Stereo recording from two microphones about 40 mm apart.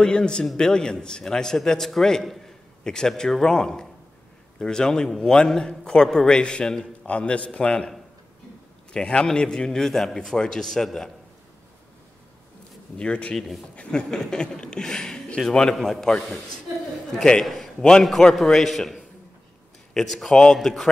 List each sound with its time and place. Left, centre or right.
0.0 s a man's voice: left
2.2 s a sound: centre
2.8 s a man's voice: centre
7.1 s a man's voice: left
7.5 s a man's voice: centre
8.9 s a man's voice: centre
12.9 s a man's voice: left
14.1 s a man's voice: centre
15.7 s a man's voice: centre
17.2 s a man's voice: centre
19.9 s speech: centre
20.5 s a man's voice: centre